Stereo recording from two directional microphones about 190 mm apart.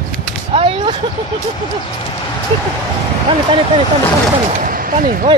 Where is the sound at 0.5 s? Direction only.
30° right (ahead or behind).